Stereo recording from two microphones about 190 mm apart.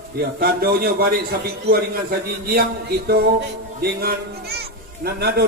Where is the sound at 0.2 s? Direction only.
55° right (ahead or behind).